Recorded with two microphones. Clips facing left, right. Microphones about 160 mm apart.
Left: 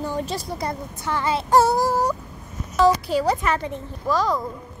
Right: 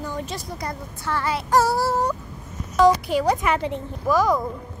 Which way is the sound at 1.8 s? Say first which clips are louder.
Left 1 dB; 10° left (ahead or behind).